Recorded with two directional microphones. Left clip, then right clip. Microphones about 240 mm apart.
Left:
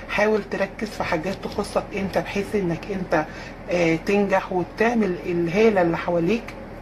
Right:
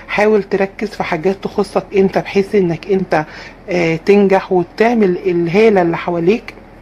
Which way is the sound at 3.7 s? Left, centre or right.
Right.